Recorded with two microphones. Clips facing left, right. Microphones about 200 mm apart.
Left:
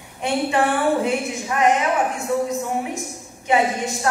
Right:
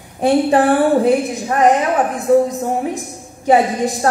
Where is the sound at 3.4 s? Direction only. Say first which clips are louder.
Right 6 dB; 35° right (ahead or behind).